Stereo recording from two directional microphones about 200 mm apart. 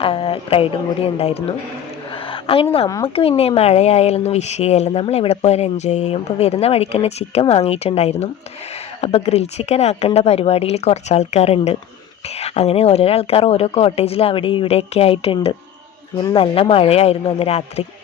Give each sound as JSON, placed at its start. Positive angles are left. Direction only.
{"t": 0.0, "sound": "speech", "side_deg": 25}
{"t": 2.3, "sound": "a sound", "side_deg": 25}
{"t": 3.2, "sound": "speech", "side_deg": 30}